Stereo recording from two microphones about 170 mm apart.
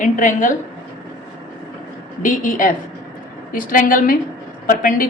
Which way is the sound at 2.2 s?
50° left (ahead or behind).